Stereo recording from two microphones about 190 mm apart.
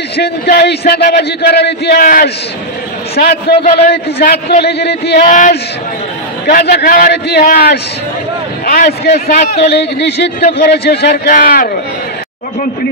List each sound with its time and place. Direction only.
0.2 s a man's voice: 55° left (ahead or behind)